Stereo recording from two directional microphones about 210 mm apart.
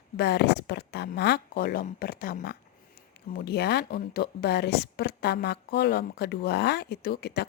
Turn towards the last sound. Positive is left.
turn(degrees=50)  # may be behind; listen again after turning